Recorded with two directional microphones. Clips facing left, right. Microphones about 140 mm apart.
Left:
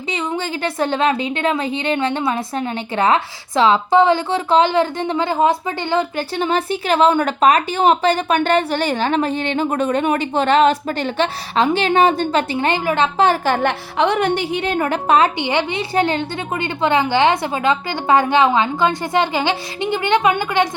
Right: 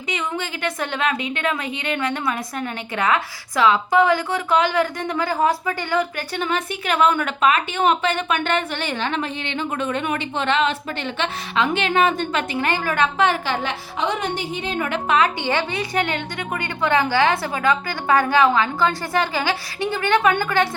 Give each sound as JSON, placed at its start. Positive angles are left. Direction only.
{"t": 0.1, "sound": "a woman's voice", "side_deg": 30}
{"t": 14.8, "sound": "a woman's voice", "side_deg": 40}
{"t": 15.4, "sound": "a woman's voice", "side_deg": 20}